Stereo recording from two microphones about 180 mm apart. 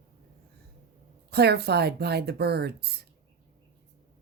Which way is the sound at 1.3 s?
65° right (ahead or behind).